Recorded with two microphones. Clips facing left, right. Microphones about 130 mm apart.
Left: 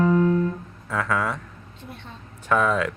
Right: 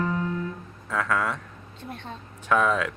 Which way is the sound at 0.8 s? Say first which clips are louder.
Left 1 dB; 10° left (ahead or behind).